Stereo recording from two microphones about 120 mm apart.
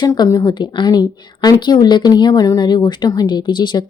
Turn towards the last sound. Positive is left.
turn(degrees=40)  # may be behind; listen again after turning